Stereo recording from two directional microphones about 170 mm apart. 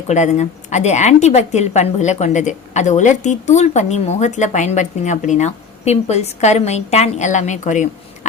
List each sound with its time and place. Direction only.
0.1 s a woman's voice: 45° left (ahead or behind)